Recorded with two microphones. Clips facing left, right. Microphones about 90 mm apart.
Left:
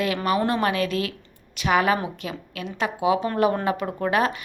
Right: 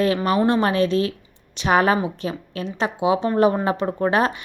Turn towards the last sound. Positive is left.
turn(degrees=-30)  # may be behind; listen again after turning